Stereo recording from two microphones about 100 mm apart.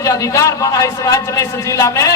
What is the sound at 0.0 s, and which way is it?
A man's voice, 35° left (ahead or behind).